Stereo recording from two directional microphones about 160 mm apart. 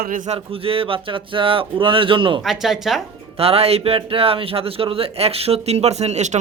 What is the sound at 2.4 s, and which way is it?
Speech, centre (ahead or behind).